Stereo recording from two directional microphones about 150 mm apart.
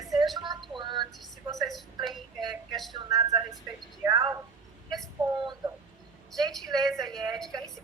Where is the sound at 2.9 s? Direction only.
25° right (ahead or behind).